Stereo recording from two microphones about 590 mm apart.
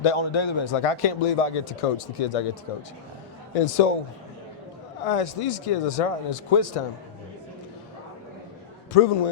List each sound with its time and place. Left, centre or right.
0.0 s a man's voice: left
3.5 s speech: left
5.0 s speech: left
8.9 s speech: left